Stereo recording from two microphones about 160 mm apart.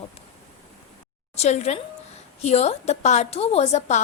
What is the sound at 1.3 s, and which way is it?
A woman's voice, 45° left (ahead or behind).